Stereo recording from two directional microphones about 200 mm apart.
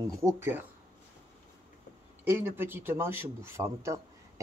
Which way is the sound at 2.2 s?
10° right (ahead or behind).